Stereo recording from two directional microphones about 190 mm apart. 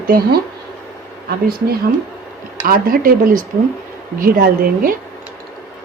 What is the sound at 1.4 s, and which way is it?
A woman's voice, 50° right (ahead or behind).